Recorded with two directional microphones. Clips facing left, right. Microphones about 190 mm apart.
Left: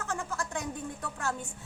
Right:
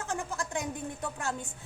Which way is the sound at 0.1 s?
15° right (ahead or behind).